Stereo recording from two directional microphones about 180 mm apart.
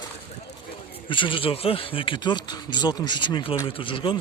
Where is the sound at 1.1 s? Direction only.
30° left (ahead or behind).